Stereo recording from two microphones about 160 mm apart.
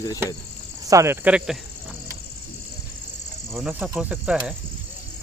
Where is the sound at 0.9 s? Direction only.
15° right (ahead or behind).